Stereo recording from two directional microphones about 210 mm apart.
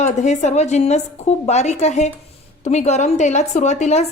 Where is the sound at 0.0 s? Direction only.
35° left (ahead or behind).